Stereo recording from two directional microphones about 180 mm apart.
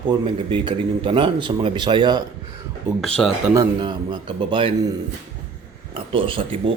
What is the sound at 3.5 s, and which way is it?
Speech, 20° right (ahead or behind).